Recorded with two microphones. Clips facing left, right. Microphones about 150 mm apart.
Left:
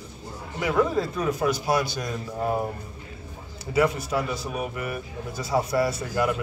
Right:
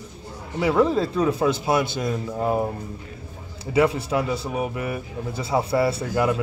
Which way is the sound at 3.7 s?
25° right (ahead or behind).